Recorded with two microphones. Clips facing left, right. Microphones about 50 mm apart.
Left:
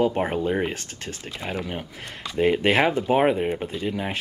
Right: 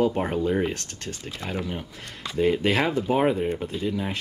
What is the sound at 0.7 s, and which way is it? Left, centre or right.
Speech, centre.